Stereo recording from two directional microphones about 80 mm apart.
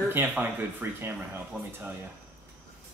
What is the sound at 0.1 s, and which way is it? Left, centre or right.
Speech, right.